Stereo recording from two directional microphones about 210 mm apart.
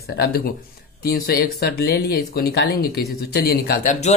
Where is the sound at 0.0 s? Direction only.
50° left (ahead or behind).